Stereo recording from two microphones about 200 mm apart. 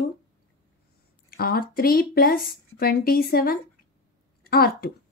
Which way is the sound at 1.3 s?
50° left (ahead or behind).